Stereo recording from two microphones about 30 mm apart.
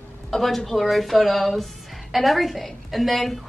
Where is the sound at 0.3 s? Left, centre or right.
Centre.